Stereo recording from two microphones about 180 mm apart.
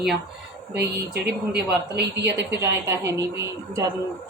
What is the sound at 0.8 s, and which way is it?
Speech, 65° right (ahead or behind).